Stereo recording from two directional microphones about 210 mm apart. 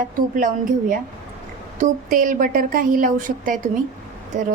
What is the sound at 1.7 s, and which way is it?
A woman's voice, 40° right (ahead or behind).